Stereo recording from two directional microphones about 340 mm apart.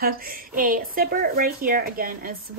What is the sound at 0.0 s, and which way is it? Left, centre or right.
Speech, right.